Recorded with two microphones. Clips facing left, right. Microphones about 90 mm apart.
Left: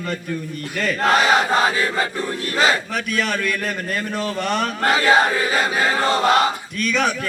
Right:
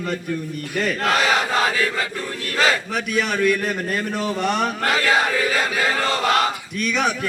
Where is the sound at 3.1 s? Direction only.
10° right (ahead or behind).